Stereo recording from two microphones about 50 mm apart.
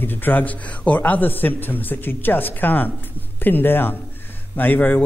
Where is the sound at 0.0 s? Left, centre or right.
Left.